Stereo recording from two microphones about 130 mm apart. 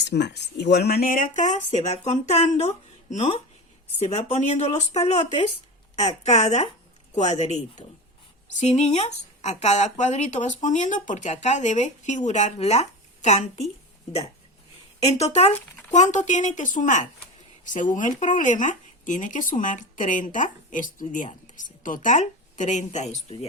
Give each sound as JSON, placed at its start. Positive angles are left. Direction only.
{"t": 0.1, "sound": "speech", "side_deg": 90}
{"t": 15.0, "sound": "speech", "side_deg": 55}
{"t": 23.1, "sound": "speech", "side_deg": 50}